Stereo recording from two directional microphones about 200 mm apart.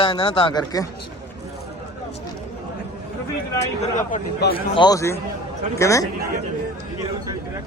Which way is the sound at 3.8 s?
40° left (ahead or behind).